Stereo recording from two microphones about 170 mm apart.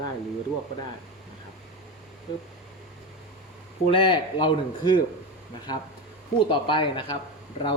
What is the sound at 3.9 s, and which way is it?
A man's voice, 30° left (ahead or behind).